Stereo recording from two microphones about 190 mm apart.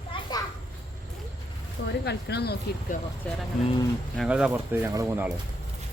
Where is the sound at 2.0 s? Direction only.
60° left (ahead or behind).